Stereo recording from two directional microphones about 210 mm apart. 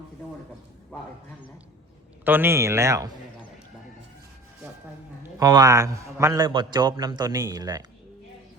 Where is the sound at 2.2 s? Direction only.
10° right (ahead or behind).